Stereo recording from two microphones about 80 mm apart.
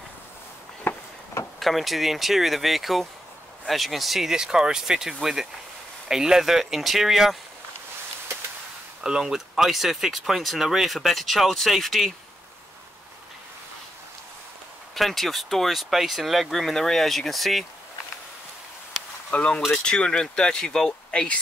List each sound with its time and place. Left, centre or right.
0.8 s a sound: left
1.6 s speech: centre
9.0 s speech: centre
15.0 s speech: centre
19.3 s speech: centre